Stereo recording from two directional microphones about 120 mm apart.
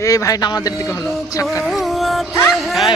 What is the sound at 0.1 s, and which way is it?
Speech, 30° left (ahead or behind).